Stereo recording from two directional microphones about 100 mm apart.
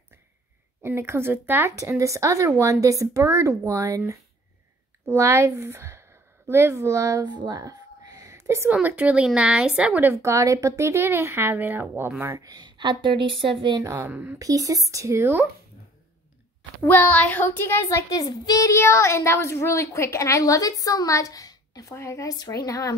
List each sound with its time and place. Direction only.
0.8 s a woman's voice: 25° right (ahead or behind)
8.6 s a woman's voice: 15° right (ahead or behind)
10.1 s a woman's voice: 30° right (ahead or behind)
12.4 s a woman's voice: 40° right (ahead or behind); by 13.7 s 60° right (ahead or behind)
13.9 s a woman's voice: 20° right (ahead or behind)
14.4 s speech: 35° right (ahead or behind)
16.8 s child singing: 20° left (ahead or behind)
17.8 s a woman's voice: 35° left (ahead or behind)
18.7 s a woman's voice: 30° left (ahead or behind)